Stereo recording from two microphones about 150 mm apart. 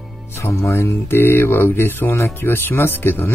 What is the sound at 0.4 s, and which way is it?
Speech, 20° left (ahead or behind).